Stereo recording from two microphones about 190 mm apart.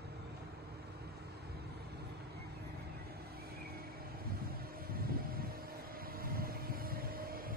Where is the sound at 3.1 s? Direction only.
55° right (ahead or behind).